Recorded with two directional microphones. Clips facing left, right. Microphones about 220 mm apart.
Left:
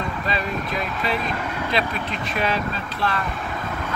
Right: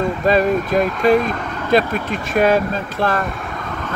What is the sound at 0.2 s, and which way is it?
Speech, 45° right (ahead or behind).